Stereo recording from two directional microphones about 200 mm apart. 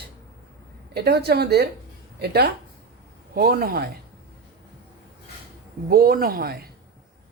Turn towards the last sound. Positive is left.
turn(degrees=-50)  # may be behind; listen again after turning